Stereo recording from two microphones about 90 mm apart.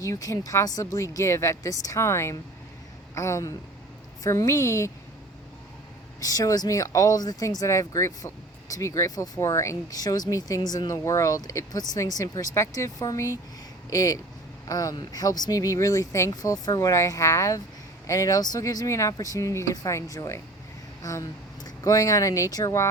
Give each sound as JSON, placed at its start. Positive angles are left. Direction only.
{"t": 0.0, "sound": "speech", "side_deg": 40}
{"t": 6.1, "sound": "speech", "side_deg": 40}
{"t": 16.3, "sound": "speech", "side_deg": 45}